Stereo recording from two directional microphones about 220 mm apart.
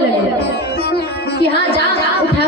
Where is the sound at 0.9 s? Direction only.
45° left (ahead or behind).